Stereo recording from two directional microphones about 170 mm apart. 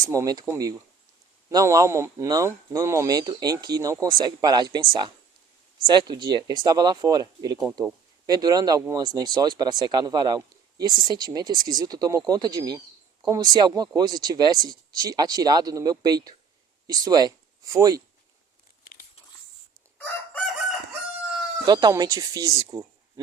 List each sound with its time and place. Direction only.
0.0 s speech: 20° right (ahead or behind)
21.7 s speech: 25° right (ahead or behind)